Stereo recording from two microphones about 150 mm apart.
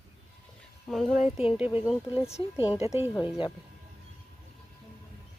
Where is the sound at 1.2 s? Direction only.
45° left (ahead or behind).